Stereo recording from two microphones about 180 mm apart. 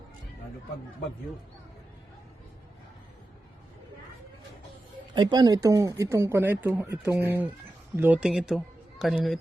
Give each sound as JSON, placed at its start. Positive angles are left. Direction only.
{"t": 5.1, "sound": "speech", "side_deg": -20}